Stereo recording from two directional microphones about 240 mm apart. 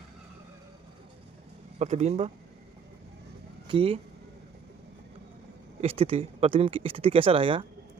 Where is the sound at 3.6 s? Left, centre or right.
Right.